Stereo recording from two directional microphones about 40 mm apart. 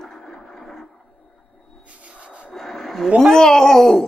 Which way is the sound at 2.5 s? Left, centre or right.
Centre.